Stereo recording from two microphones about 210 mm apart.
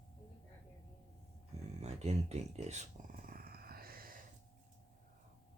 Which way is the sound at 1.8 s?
30° right (ahead or behind).